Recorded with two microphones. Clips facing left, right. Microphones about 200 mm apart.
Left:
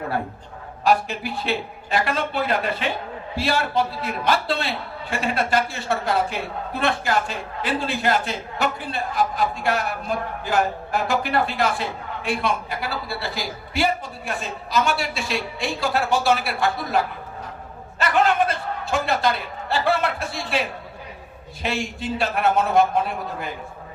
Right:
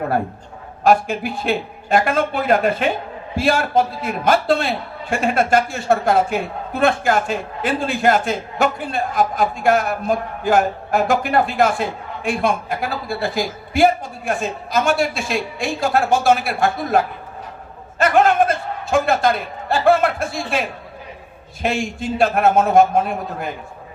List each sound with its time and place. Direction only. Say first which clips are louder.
0.9 s a man's voice: right 5 dB; 50° right (ahead or behind)
18.0 s a man's voice: right 5 dB; 50° right (ahead or behind)